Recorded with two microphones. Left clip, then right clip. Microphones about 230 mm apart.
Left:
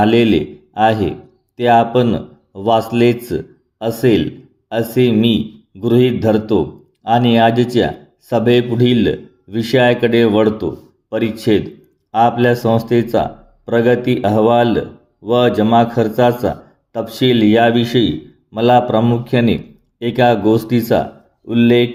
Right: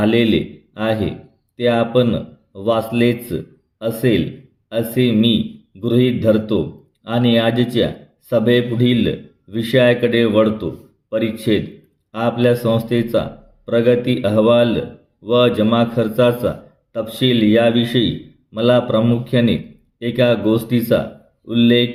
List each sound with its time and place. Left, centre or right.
0.0 s a man's voice: left